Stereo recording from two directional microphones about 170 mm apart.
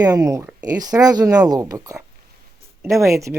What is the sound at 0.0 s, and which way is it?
Speech, 20° right (ahead or behind).